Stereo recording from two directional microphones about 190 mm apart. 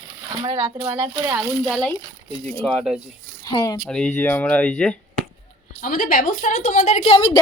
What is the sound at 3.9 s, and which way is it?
Speech, 5° left (ahead or behind).